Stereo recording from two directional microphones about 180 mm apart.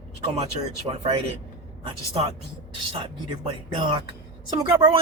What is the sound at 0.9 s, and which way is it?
Speech, 30° right (ahead or behind).